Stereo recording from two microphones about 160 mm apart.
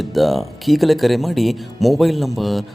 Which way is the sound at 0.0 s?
Centre (ahead or behind).